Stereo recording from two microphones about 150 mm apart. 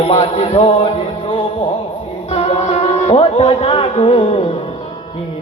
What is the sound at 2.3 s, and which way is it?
Speech, 45° left (ahead or behind).